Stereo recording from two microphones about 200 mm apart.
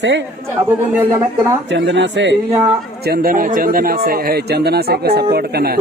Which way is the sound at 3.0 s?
50° right (ahead or behind).